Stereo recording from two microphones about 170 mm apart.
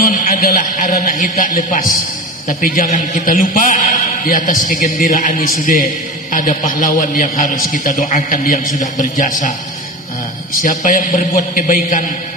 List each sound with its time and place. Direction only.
0.0 s a man's voice: 55° left (ahead or behind)
10.6 s a man's voice: 50° left (ahead or behind)